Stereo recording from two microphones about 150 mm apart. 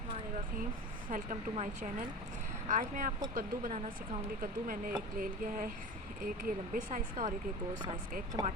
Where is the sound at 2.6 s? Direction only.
60° right (ahead or behind).